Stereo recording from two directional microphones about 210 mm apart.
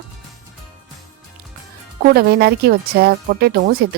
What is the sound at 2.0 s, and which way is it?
Speech, 45° right (ahead or behind).